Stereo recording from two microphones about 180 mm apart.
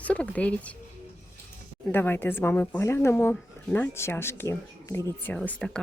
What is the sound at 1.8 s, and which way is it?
Speech, 10° left (ahead or behind).